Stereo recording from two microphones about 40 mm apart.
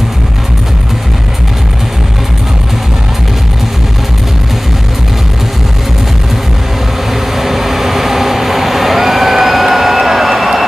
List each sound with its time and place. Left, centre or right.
7.3 s vehicle: centre